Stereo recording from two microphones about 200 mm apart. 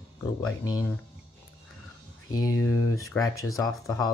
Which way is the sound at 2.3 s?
15° left (ahead or behind).